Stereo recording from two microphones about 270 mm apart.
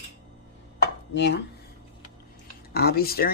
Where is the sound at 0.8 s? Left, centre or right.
Left.